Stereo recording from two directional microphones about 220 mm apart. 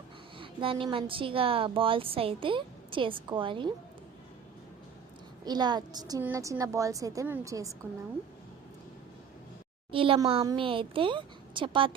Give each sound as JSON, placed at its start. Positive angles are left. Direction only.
{"t": 0.3, "sound": "a woman's voice", "side_deg": -25}
{"t": 5.5, "sound": "a woman's voice", "side_deg": -20}
{"t": 9.9, "sound": "a woman's voice", "side_deg": -25}